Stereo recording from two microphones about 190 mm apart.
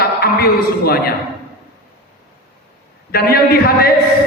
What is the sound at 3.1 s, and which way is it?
Speech, 55° left (ahead or behind).